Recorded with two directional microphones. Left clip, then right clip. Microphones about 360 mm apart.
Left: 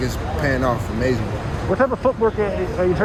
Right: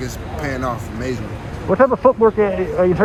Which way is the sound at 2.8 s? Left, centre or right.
Centre.